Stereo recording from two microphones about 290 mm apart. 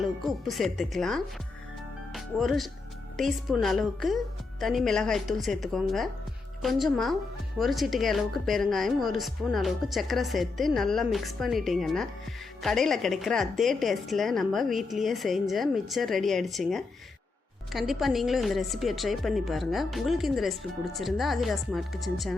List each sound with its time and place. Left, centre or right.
0.0 s a woman's voice: centre